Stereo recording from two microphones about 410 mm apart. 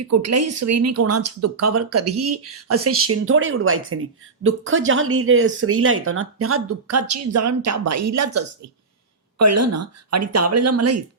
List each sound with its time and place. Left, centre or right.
0.0 s a woman's voice: right